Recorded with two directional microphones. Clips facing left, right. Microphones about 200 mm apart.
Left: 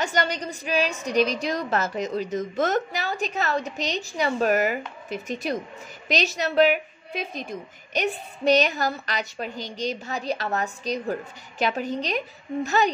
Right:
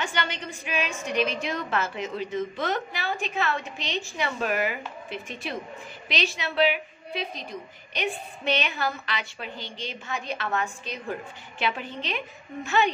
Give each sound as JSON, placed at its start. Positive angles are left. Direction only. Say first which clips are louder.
{"t": 0.0, "sound": "a woman's voice", "louder": "left 5 dB", "side_deg": 40}